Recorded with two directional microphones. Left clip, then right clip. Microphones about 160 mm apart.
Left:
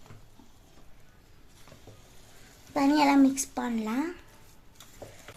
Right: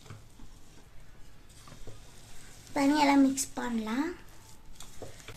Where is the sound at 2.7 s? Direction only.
40° left (ahead or behind).